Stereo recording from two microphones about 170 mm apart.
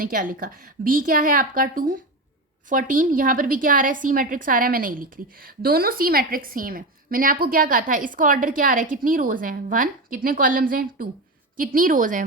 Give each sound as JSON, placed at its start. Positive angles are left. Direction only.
{"t": 0.0, "sound": "a woman's voice", "side_deg": -55}